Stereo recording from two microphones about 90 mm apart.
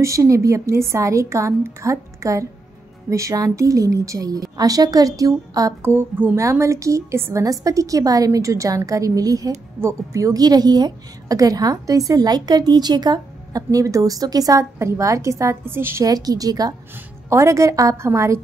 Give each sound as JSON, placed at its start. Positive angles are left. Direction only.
{"t": 0.0, "sound": "a woman's voice", "side_deg": -35}
{"t": 5.8, "sound": "speech", "side_deg": -25}
{"t": 6.3, "sound": "a woman's voice", "side_deg": -35}
{"t": 16.1, "sound": "a woman's voice", "side_deg": -45}